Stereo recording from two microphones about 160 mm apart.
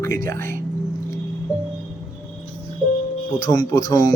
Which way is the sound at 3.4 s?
20° left (ahead or behind).